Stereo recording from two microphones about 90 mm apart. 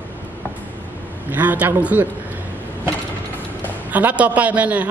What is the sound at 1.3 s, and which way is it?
Speech, 20° right (ahead or behind).